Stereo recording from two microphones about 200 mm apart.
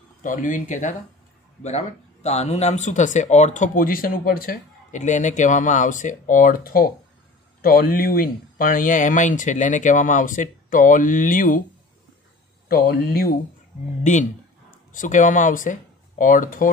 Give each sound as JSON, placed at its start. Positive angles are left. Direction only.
{"t": 0.2, "sound": "speech", "side_deg": 40}
{"t": 12.6, "sound": "speech", "side_deg": 50}
{"t": 14.0, "sound": "speech", "side_deg": 35}